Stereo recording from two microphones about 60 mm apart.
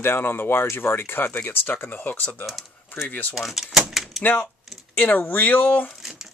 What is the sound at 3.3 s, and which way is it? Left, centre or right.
Speech, centre.